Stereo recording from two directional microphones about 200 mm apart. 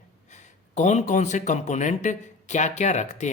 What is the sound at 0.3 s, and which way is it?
Speech, 35° left (ahead or behind).